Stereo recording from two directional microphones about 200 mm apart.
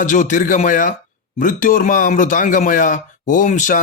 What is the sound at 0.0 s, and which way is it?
A man's voice, 40° left (ahead or behind).